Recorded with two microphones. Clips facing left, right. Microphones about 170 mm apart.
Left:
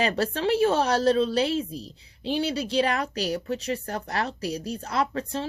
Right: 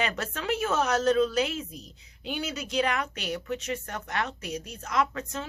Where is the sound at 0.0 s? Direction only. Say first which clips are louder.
Left 6 dB; 35° left (ahead or behind).